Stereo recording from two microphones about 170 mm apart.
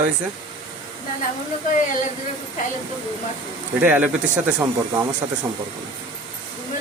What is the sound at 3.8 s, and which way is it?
Speech, 10° right (ahead or behind).